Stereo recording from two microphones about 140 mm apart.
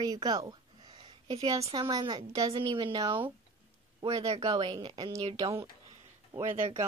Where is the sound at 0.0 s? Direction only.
25° right (ahead or behind).